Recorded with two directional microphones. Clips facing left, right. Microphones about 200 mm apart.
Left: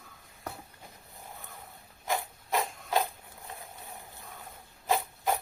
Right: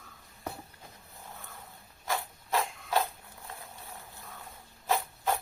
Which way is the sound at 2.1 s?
15° left (ahead or behind).